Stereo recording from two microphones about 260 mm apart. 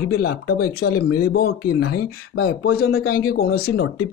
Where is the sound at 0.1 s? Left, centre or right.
Left.